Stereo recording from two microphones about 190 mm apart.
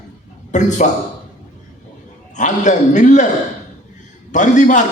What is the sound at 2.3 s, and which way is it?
Speech, 40° left (ahead or behind).